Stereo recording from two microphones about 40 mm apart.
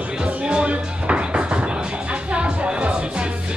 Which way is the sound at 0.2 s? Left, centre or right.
Right.